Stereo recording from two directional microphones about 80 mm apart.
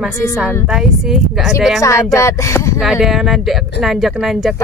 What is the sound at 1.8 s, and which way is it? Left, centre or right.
Speech, left.